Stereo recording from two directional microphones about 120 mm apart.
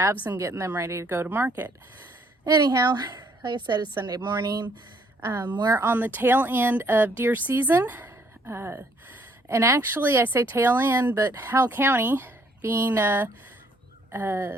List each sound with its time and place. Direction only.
0.3 s a woman's voice: 25° right (ahead or behind)
2.4 s a woman's voice: 35° right (ahead or behind)
5.3 s a woman's voice: 20° right (ahead or behind)
5.5 s a woman's voice: 30° right (ahead or behind)
5.8 s a woman's voice: 15° right (ahead or behind)